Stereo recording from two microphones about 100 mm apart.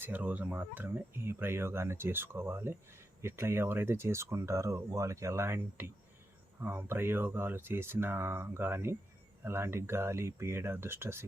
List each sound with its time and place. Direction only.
0.0 s speech: 20° right (ahead or behind)